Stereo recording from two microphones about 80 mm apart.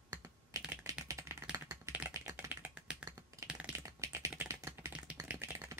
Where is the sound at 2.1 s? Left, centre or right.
Right.